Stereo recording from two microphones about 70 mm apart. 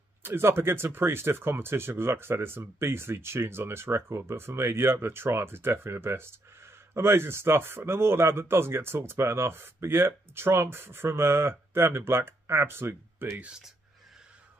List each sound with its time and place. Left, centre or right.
0.2 s speech: right